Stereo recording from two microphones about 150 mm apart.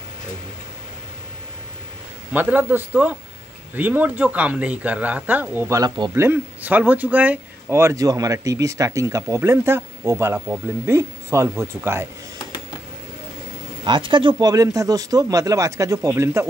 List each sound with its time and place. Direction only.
2.3 s speech: 10° right (ahead or behind); by 6.1 s 30° right (ahead or behind)
6.1 s speech: 15° right (ahead or behind)
13.8 s speech: 30° right (ahead or behind)